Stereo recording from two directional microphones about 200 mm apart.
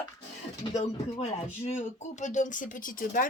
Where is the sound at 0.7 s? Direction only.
30° left (ahead or behind).